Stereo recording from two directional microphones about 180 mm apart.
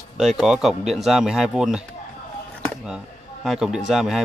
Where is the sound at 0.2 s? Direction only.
Centre (ahead or behind).